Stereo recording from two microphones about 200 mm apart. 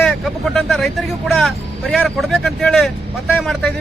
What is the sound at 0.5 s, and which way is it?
A man's voice, centre (ahead or behind).